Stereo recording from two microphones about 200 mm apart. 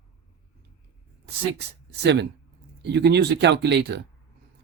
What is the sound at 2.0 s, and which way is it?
Speech, 60° right (ahead or behind).